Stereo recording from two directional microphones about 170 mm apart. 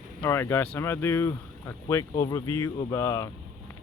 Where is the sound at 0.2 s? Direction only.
15° left (ahead or behind).